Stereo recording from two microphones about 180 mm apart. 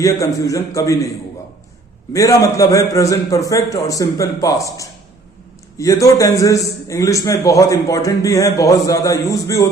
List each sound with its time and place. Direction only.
0.3 s a man's voice: 20° left (ahead or behind)
2.1 s a man's voice: 20° left (ahead or behind)